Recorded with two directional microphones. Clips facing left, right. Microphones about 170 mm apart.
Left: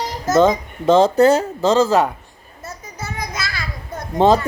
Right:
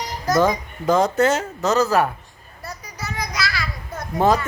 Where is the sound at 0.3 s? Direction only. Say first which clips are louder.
Left 5 dB; 25° left (ahead or behind).